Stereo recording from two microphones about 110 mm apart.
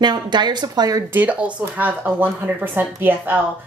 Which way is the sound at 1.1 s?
15° right (ahead or behind).